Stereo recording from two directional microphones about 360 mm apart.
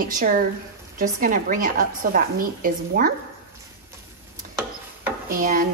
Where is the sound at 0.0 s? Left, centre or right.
Right.